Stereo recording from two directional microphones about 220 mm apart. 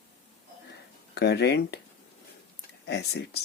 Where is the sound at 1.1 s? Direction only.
50° left (ahead or behind).